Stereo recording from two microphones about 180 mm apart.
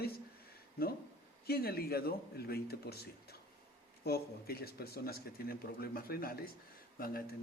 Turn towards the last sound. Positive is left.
turn(degrees=55)  # may be behind; listen again after turning